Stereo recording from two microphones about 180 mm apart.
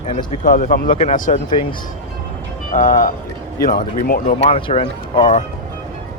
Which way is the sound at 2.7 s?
50° left (ahead or behind).